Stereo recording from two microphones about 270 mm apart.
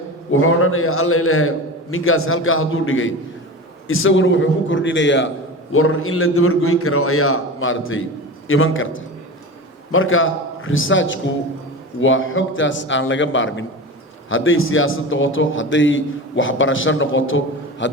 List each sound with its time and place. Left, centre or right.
0.3 s a man's voice: left